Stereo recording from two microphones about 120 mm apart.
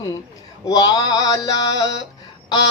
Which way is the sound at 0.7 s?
35° left (ahead or behind).